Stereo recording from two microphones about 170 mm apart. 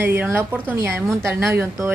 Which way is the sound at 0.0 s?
10° right (ahead or behind).